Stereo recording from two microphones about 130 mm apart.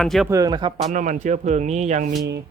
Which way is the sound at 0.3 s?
25° right (ahead or behind).